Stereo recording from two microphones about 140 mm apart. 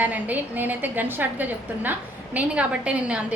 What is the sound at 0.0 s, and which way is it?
A woman's voice, 10° right (ahead or behind).